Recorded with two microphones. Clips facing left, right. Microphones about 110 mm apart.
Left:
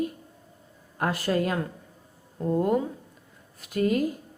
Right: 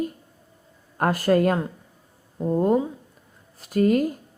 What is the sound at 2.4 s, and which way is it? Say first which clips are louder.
Speech: right 2 dB; 15° right (ahead or behind).